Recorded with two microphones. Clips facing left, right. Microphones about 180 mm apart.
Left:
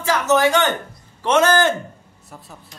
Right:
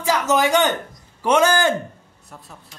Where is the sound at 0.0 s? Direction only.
15° right (ahead or behind).